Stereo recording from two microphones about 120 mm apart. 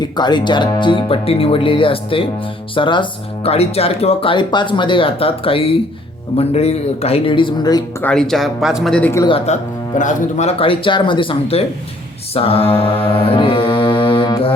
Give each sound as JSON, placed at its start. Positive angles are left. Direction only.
{"t": 0.0, "sound": "speech", "side_deg": 35}
{"t": 8.0, "sound": "speech", "side_deg": 5}
{"t": 9.5, "sound": "speech", "side_deg": 70}
{"t": 10.0, "sound": "a man's voice", "side_deg": 90}
{"t": 10.7, "sound": "speech", "side_deg": 45}
{"t": 12.3, "sound": "mantra", "side_deg": 55}